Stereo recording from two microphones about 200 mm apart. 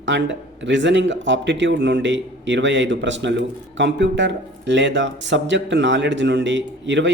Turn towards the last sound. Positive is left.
turn(degrees=-65)  # may be behind; listen again after turning